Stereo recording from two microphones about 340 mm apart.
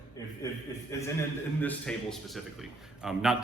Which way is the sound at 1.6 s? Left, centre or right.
Centre.